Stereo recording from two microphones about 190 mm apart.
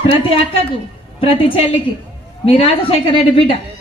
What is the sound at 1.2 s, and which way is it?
A woman's voice, 30° left (ahead or behind).